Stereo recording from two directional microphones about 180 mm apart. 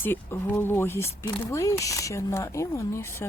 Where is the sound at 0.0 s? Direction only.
10° left (ahead or behind).